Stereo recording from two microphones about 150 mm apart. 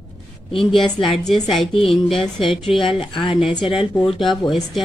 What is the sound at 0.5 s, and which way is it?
Speech, 35° left (ahead or behind).